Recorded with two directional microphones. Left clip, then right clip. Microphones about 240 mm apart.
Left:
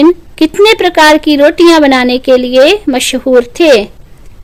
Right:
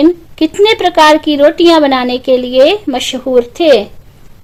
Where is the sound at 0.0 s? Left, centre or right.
Left.